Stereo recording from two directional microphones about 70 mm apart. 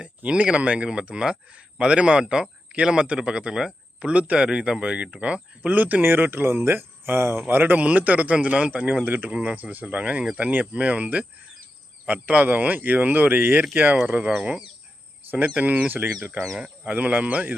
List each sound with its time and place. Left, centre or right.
0.0 s speech: centre
15.3 s speech: right
16.6 s speech: centre
16.9 s speech: right